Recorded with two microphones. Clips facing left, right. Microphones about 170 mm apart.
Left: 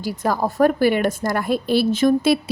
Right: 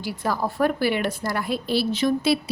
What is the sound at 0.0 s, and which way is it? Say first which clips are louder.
A woman's voice: left 4 dB; 45° left (ahead or behind).